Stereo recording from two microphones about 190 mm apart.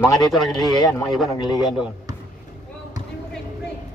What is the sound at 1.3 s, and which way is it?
Speech, 20° left (ahead or behind).